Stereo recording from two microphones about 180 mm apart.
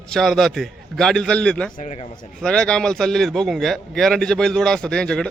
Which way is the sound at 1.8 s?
40° left (ahead or behind).